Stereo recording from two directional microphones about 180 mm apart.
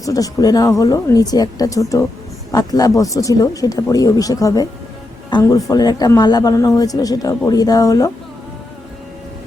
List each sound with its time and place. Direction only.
0.0 s speech: 20° left (ahead or behind)